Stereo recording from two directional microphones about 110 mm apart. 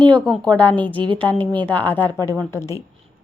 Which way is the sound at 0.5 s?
15° left (ahead or behind).